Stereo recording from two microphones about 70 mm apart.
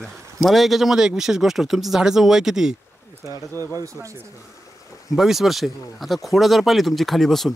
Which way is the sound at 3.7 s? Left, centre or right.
Right.